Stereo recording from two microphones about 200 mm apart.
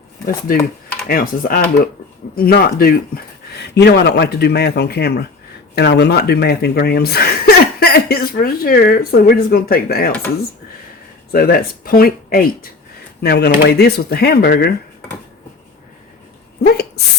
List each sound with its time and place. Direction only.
0.5 s speech: 45° left (ahead or behind)
11.3 s speech: 50° left (ahead or behind)